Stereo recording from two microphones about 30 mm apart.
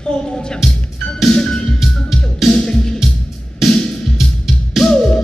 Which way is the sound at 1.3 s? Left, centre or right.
Left.